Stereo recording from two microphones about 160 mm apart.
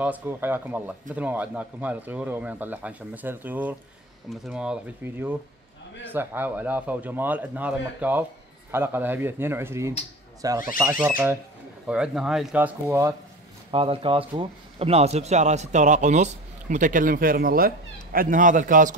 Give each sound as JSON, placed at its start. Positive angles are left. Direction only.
{"t": 0.0, "sound": "speech", "side_deg": -10}
{"t": 11.0, "sound": "speech", "side_deg": -10}
{"t": 13.7, "sound": "speech", "side_deg": -35}